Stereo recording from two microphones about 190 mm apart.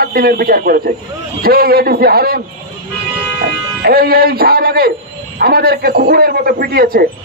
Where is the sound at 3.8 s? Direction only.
55° right (ahead or behind).